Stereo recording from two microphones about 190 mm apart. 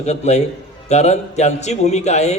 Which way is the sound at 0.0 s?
35° left (ahead or behind).